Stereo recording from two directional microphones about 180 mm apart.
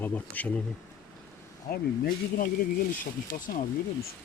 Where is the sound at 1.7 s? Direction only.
55° left (ahead or behind).